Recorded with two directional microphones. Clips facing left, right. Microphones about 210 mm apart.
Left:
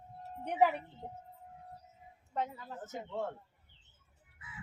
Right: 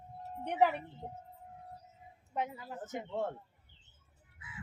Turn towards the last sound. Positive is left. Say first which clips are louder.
# right 2 dB
turn(degrees=-15)  # may be behind; listen again after turning